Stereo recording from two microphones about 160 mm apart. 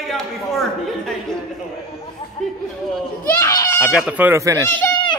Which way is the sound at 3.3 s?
20° left (ahead or behind).